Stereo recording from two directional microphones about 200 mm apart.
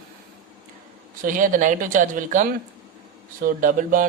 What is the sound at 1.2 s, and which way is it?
Speech, 40° right (ahead or behind).